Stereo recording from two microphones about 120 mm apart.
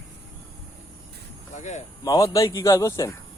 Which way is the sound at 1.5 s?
80° left.